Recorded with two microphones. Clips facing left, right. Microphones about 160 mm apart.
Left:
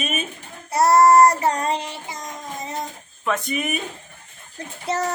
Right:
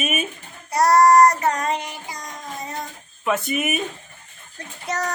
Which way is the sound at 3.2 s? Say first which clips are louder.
Right 2 dB; 5° right (ahead or behind).